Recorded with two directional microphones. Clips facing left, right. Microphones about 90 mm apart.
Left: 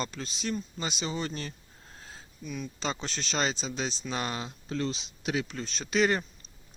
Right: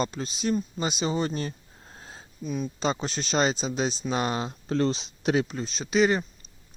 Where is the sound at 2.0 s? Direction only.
25° right (ahead or behind).